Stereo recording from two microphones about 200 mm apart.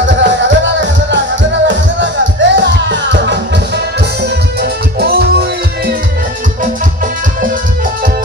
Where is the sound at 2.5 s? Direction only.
60° right (ahead or behind).